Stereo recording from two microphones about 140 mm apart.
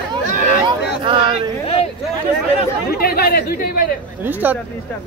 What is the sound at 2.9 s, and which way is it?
Chatter, 90° left.